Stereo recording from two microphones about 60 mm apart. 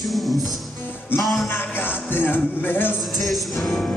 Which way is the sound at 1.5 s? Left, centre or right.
Left.